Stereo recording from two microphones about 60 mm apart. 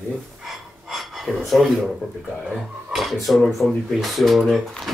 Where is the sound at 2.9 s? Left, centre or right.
Centre.